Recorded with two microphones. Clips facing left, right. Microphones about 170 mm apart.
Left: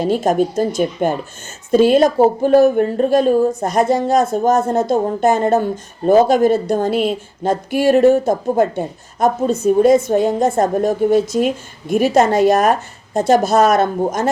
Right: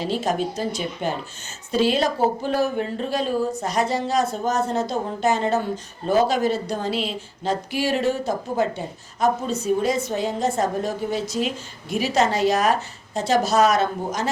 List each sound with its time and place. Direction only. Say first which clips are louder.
0.0 s speech: left 8 dB; 50° left (ahead or behind)